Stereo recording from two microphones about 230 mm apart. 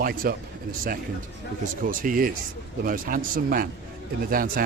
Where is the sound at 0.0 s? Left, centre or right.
Right.